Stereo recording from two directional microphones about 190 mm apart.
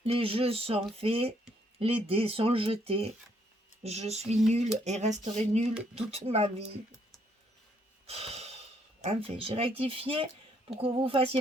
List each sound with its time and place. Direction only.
0.0 s speech: 30° right (ahead or behind)
8.0 s a woman's voice: 35° right (ahead or behind)